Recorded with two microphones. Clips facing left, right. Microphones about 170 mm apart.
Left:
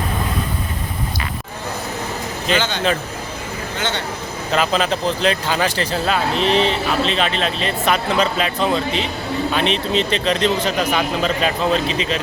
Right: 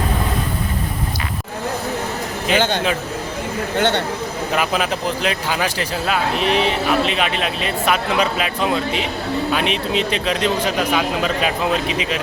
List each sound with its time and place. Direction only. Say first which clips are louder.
2.5 s a man's voice: right 1 dB; 55° right (ahead or behind)
4.5 s speech: left 3 dB; 10° right (ahead or behind)